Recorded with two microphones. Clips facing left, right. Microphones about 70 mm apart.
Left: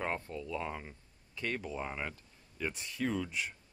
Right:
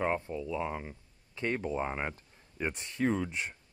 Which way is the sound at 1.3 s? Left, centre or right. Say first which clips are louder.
Right 5 dB; right.